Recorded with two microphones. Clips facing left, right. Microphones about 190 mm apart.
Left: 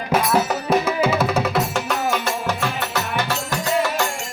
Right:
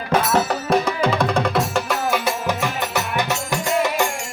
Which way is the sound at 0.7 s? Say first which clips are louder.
Left 1 dB; 5° left (ahead or behind).